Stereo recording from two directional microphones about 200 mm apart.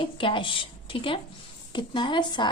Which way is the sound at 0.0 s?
25° left (ahead or behind).